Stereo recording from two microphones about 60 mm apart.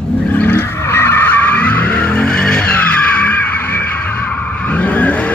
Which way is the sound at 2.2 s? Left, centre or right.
Centre.